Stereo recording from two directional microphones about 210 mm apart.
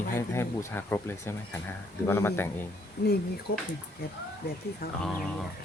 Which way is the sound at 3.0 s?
55° left (ahead or behind).